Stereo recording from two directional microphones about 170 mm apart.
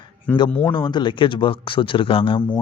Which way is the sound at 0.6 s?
25° left (ahead or behind).